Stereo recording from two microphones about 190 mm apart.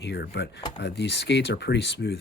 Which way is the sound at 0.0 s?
65° left (ahead or behind).